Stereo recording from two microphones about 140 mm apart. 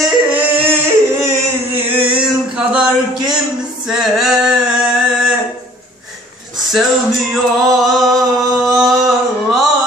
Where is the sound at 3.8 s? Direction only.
5° right (ahead or behind).